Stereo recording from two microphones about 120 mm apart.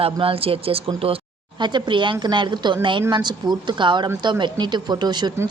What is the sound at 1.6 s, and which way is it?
Speech, 40° right (ahead or behind).